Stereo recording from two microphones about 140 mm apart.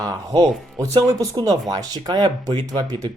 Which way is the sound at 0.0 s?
25° right (ahead or behind).